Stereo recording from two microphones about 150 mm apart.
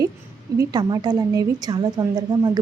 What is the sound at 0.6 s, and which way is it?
A woman's voice, 30° right (ahead or behind).